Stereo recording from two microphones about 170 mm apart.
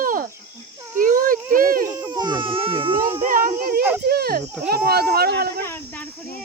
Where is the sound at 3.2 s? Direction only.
55° right (ahead or behind).